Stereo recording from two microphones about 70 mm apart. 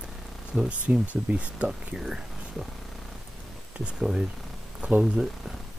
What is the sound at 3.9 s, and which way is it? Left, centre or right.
Speech, centre.